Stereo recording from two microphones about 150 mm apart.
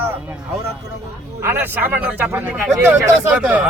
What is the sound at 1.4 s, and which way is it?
Speech, 15° right (ahead or behind).